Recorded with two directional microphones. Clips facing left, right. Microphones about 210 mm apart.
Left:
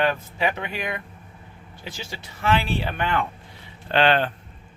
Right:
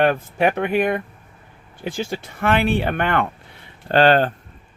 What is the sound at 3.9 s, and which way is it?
Speech, 45° right (ahead or behind).